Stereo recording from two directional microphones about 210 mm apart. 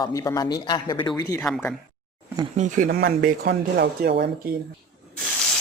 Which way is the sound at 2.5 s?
40° right (ahead or behind).